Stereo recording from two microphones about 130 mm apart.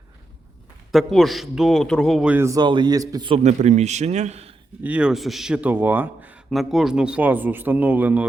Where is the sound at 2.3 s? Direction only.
20° right (ahead or behind).